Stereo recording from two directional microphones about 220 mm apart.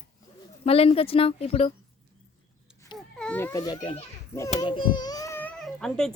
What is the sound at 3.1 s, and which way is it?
A child's voice, 5° left (ahead or behind).